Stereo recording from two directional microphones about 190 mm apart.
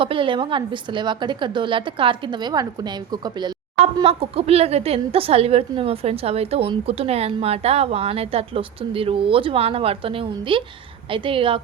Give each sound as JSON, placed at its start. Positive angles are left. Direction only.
{"t": 0.0, "sound": "a woman's voice", "side_deg": -25}